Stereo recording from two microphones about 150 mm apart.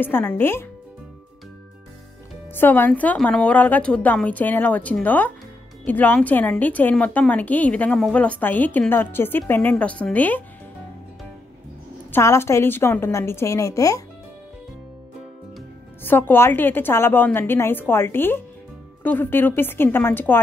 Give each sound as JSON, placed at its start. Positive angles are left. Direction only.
{"t": 0.0, "sound": "a woman's voice", "side_deg": 10}
{"t": 2.5, "sound": "a woman's voice", "side_deg": 15}
{"t": 12.1, "sound": "a woman's voice", "side_deg": 15}
{"t": 16.0, "sound": "a woman's voice", "side_deg": 15}